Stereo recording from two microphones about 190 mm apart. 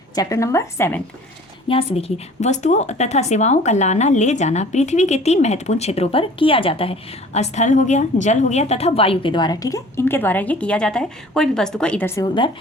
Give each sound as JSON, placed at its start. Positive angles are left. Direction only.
{"t": 0.2, "sound": "a woman's voice", "side_deg": 15}
{"t": 1.6, "sound": "a woman's voice", "side_deg": 30}